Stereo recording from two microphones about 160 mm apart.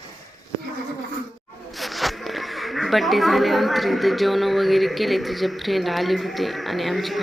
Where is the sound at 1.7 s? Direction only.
Centre (ahead or behind).